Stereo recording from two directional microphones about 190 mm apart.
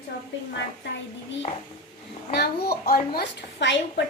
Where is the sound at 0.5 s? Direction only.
70° left (ahead or behind).